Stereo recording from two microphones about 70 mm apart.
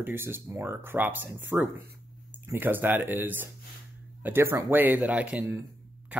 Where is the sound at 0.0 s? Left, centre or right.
Right.